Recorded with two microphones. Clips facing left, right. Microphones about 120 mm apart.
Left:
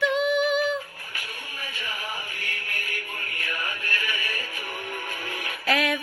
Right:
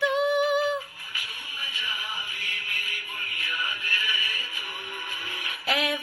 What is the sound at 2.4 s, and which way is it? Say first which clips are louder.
Music: left 3 dB; 50° left (ahead or behind).